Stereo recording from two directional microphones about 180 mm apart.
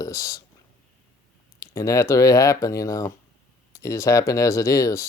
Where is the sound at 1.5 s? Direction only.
15° left (ahead or behind).